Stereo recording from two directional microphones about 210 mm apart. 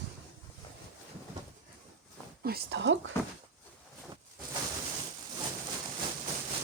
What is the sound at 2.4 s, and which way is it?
Speech, 45° right (ahead or behind).